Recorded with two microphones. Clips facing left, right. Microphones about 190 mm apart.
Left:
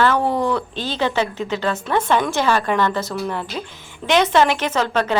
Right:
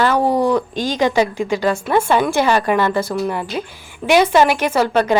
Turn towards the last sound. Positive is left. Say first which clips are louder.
# right 4 dB
turn(degrees=-10)  # may be behind; listen again after turning